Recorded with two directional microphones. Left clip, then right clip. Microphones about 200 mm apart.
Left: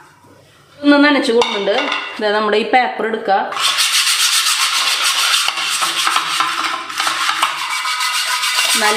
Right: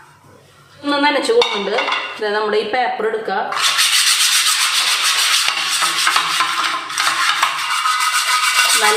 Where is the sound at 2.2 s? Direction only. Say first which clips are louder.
Left 4 dB; 45° left (ahead or behind).